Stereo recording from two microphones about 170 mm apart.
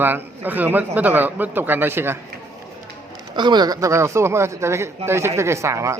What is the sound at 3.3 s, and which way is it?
Speech, 25° right (ahead or behind).